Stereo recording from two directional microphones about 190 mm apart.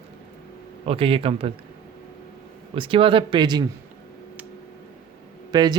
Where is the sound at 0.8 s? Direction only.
30° right (ahead or behind).